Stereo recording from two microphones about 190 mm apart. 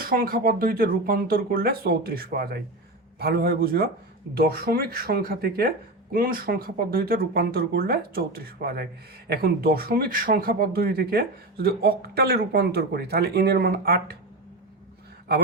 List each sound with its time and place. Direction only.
0.0 s speech: 50° right (ahead or behind)